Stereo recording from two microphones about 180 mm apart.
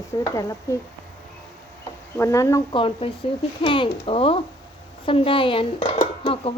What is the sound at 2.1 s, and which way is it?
Speech, 15° left (ahead or behind).